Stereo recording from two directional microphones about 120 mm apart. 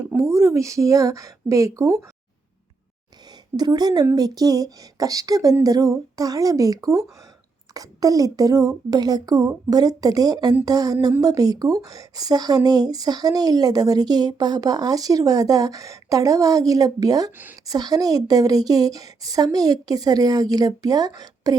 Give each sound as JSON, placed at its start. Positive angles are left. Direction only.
{"t": 0.2, "sound": "a woman's voice", "side_deg": -25}
{"t": 3.6, "sound": "a woman's voice", "side_deg": -35}